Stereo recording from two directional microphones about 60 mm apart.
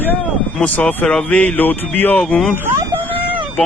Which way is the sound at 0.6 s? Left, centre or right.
Left.